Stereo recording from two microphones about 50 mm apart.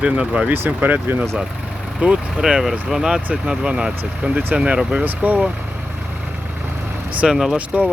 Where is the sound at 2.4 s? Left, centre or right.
Centre.